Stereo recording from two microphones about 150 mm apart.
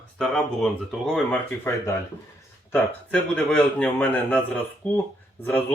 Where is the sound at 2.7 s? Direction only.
10° left (ahead or behind).